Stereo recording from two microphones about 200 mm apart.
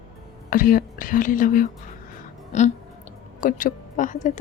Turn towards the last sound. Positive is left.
turn(degrees=40)  # may be behind; listen again after turning